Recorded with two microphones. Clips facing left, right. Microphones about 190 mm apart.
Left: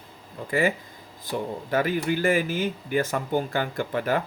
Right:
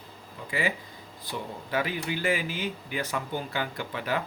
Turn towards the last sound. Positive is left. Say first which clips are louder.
# left 6 dB
turn(degrees=45)  # may be behind; listen again after turning